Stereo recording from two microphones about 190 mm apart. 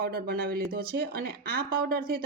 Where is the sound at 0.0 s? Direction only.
55° right (ahead or behind).